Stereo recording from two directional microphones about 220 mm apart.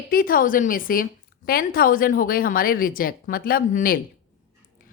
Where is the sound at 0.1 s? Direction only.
40° left (ahead or behind).